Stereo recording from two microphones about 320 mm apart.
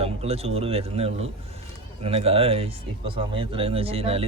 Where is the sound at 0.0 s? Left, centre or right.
Centre.